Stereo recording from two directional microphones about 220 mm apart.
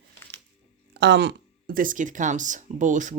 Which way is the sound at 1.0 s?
50° right (ahead or behind).